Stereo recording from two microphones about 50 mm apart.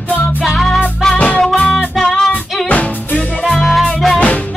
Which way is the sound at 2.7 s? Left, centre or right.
Left.